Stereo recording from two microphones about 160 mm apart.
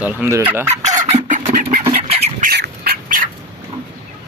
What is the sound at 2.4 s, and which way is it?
Duck, 80° right.